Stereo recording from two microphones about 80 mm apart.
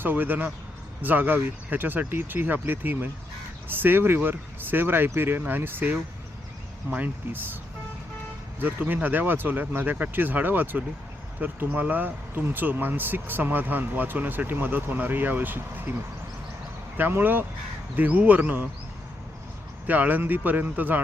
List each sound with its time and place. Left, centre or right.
0.0 s speech: right
8.5 s speech: right
17.0 s speech: right
19.9 s speech: right